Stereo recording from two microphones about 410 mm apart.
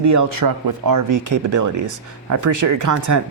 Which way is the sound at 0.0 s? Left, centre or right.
Right.